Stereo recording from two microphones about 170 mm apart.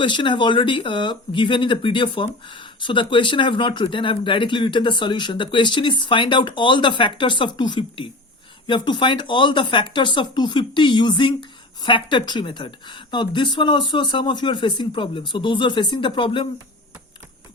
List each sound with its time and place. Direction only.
0.0 s speech: 30° left (ahead or behind)